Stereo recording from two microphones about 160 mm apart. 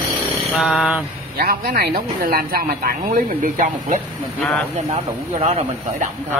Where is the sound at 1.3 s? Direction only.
70° right (ahead or behind); by 6.0 s 40° right (ahead or behind).